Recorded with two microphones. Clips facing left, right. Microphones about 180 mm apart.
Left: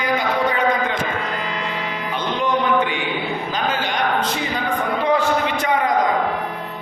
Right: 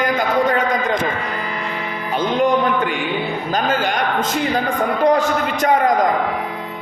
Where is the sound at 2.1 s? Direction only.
45° right (ahead or behind).